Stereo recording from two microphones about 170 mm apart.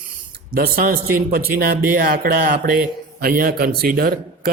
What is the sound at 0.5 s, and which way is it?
A man's voice, 55° right (ahead or behind).